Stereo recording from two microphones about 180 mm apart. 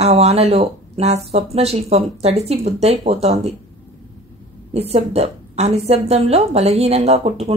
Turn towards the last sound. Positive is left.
turn(degrees=-35)  # may be behind; listen again after turning